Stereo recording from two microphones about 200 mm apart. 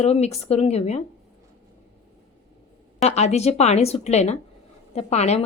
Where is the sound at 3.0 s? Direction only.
35° left (ahead or behind).